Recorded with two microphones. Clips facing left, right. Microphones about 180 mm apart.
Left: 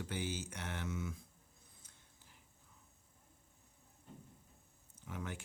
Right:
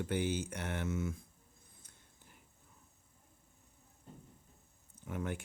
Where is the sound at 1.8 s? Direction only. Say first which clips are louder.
Right 2 dB; 55° right (ahead or behind).